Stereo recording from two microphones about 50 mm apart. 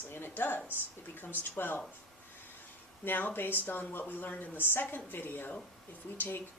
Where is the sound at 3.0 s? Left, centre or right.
Left.